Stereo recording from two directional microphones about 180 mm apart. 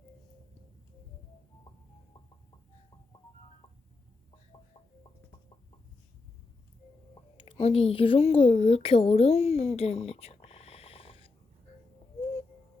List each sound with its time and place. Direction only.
7.1 s speech: 30° left (ahead or behind)